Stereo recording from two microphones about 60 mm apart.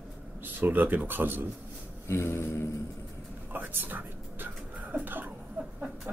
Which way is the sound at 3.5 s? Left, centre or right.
Right.